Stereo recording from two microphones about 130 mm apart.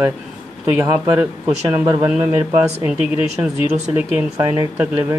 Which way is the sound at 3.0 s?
50° left (ahead or behind).